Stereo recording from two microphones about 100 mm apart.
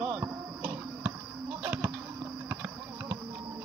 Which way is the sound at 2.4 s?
20° right (ahead or behind).